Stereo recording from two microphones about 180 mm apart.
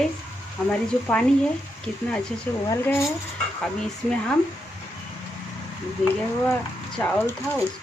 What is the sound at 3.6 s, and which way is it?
Stir, 5° left (ahead or behind).